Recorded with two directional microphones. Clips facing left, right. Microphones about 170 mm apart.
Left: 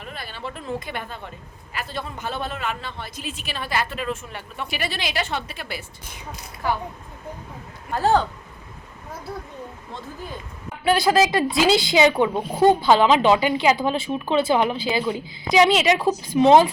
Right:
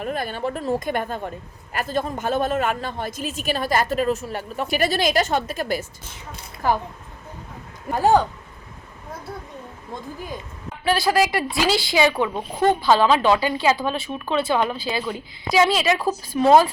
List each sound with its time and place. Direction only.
0.0 s speech: 45° right (ahead or behind)
7.9 s speech: 15° right (ahead or behind)
10.8 s speech: 20° left (ahead or behind)
12.4 s speech: 10° left (ahead or behind)